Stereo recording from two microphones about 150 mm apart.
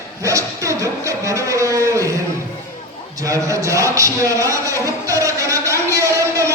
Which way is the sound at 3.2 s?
20° right (ahead or behind).